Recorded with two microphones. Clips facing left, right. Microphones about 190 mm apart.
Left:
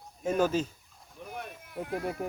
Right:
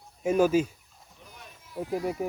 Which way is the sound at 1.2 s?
60° left (ahead or behind).